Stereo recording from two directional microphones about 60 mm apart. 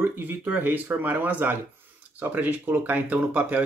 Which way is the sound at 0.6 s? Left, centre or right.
Right.